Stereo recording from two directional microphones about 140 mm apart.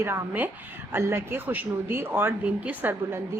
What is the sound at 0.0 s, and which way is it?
A woman's voice, 15° right (ahead or behind).